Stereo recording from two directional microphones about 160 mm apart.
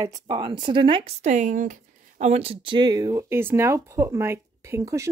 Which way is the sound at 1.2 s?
50° right (ahead or behind).